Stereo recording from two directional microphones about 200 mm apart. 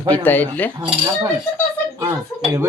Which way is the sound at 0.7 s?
20° right (ahead or behind).